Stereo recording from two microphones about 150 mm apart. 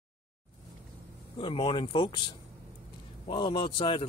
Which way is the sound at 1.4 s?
40° left (ahead or behind).